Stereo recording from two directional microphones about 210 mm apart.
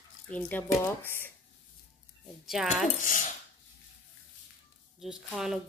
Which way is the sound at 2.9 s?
40° left (ahead or behind).